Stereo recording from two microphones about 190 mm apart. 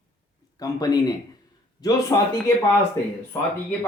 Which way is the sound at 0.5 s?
20° left (ahead or behind).